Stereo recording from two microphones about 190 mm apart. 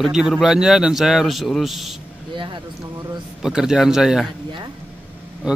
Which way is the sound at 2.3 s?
25° right (ahead or behind).